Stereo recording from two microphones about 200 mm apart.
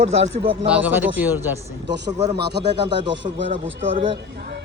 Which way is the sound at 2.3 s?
55° right (ahead or behind).